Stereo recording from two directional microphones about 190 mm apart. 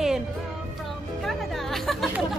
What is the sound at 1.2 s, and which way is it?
Music, centre (ahead or behind).